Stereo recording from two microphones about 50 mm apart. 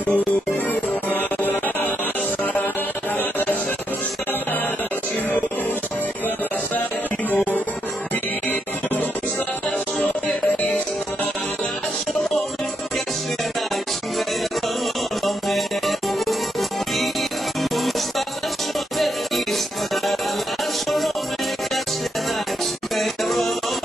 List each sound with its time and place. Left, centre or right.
0.0 s music: left
3.2 s music: left
9.9 s music: left
15.2 s music: centre
18.9 s music: centre
22.9 s music: centre